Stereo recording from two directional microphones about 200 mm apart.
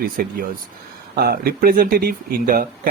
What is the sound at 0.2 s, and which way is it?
Speech, 45° right (ahead or behind).